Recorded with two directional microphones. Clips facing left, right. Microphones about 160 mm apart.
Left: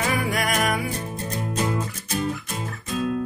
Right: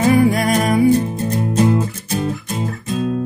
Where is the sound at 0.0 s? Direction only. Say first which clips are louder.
Right 11 dB; 30° right (ahead or behind).